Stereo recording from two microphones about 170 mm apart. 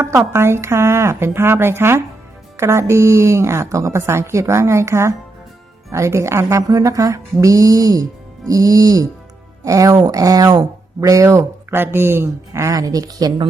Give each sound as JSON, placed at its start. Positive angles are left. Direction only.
{"t": 0.0, "sound": "a woman's voice", "side_deg": -15}